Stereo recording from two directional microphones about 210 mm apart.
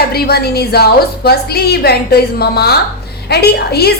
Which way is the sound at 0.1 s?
45° left (ahead or behind).